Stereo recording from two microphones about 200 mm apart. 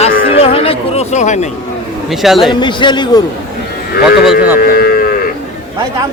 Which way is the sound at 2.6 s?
20° left (ahead or behind).